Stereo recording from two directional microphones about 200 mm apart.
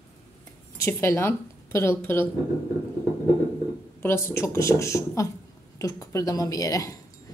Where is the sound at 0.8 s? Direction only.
10° left (ahead or behind).